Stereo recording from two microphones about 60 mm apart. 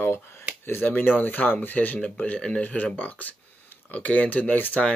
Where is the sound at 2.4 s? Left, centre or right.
Centre.